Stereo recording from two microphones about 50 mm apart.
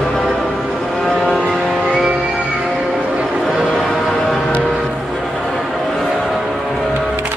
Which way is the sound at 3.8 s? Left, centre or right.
Centre.